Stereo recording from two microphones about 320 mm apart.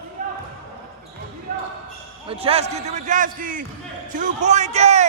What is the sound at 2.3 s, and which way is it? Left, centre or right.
A man's voice, centre.